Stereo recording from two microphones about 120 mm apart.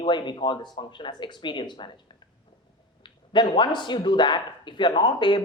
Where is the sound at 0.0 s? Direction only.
40° left (ahead or behind).